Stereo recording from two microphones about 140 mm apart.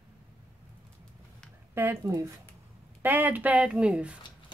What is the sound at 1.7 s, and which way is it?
Speech, 15° right (ahead or behind).